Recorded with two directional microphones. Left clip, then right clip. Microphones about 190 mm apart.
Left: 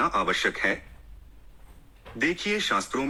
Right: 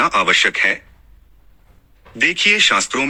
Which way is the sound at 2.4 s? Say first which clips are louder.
Right 16 dB; 45° right (ahead or behind).